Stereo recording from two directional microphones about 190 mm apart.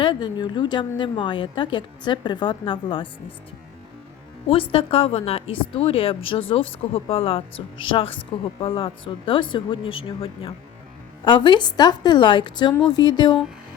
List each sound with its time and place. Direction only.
0.0 s a woman's voice: 25° left (ahead or behind)
4.4 s a woman's voice: 30° left (ahead or behind)